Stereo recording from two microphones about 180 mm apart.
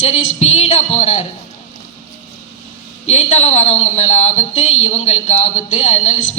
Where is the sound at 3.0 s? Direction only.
40° left (ahead or behind).